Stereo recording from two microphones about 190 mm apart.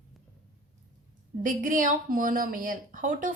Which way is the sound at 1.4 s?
45° right (ahead or behind).